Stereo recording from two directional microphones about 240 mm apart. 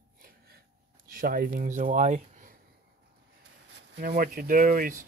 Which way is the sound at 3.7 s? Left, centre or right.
Right.